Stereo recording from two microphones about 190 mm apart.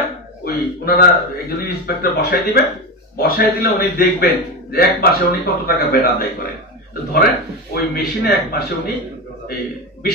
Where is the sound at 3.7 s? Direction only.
55° left (ahead or behind).